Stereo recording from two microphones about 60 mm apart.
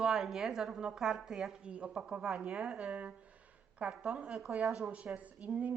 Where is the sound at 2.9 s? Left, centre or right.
Right; by 4.9 s centre.